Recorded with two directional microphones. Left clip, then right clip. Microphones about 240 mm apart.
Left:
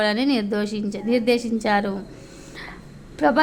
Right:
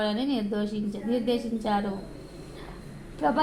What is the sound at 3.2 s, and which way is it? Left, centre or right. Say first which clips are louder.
Speech: left 7 dB; left.